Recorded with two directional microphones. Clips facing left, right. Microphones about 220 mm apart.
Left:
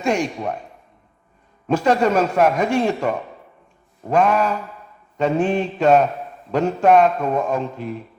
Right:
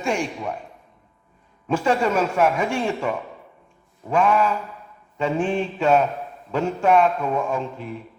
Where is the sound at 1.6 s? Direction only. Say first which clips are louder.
Left 3 dB; 40° left (ahead or behind).